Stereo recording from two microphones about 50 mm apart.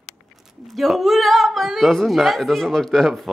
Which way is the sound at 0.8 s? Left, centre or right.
Centre.